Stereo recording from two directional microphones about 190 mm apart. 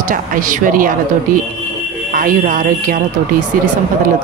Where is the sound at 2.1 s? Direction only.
45° right (ahead or behind).